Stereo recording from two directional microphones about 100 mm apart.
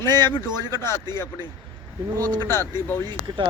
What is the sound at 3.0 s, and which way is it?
Speech, 50° right (ahead or behind).